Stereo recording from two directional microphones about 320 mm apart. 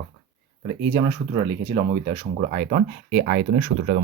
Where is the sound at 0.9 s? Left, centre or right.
Centre.